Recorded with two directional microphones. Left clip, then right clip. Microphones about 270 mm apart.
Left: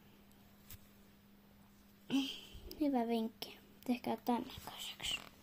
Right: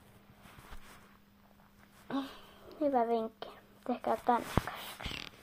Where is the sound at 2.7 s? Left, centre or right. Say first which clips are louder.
Right 6 dB; left.